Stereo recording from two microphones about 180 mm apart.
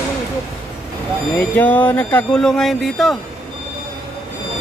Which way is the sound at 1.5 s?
10° left (ahead or behind).